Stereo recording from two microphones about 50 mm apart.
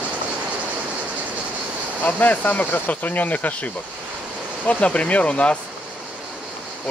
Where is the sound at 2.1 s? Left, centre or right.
Left.